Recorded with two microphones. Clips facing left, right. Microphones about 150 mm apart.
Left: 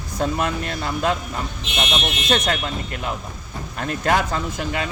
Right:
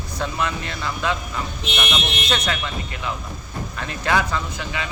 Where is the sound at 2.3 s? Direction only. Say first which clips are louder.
Left 4 dB; 45° left (ahead or behind).